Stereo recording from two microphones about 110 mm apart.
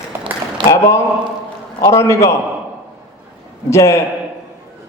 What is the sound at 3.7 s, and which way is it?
Speech, 25° left (ahead or behind).